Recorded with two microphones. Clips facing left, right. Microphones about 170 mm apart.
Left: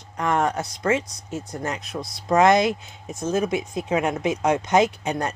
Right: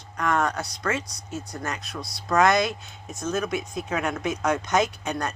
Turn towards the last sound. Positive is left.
turn(degrees=25)  # may be behind; listen again after turning